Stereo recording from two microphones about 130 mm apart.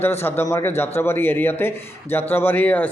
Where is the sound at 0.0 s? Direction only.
15° left (ahead or behind).